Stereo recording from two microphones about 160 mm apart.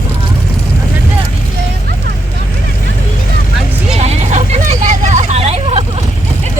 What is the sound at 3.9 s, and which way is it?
Vehicle, 45° right (ahead or behind).